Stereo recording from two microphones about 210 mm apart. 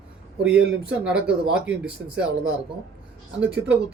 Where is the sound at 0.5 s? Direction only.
55° right (ahead or behind).